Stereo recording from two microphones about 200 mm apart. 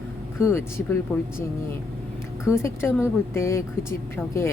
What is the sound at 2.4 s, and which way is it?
Speech, 15° left (ahead or behind).